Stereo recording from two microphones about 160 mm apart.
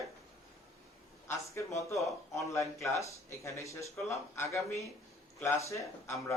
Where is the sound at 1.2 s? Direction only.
15° left (ahead or behind).